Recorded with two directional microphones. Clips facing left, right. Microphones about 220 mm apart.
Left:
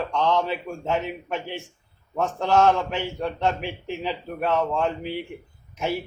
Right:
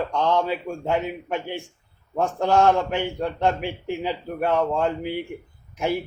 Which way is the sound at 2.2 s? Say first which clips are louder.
Right 1 dB; 15° right (ahead or behind).